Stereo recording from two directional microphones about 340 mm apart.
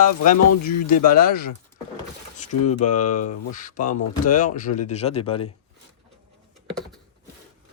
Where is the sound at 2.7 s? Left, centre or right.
Left.